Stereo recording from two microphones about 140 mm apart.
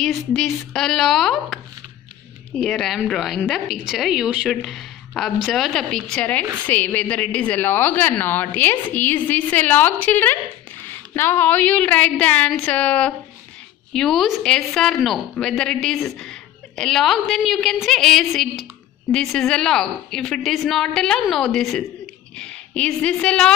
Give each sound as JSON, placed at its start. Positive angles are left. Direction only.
{"t": 0.3, "sound": "a woman's voice", "side_deg": 0}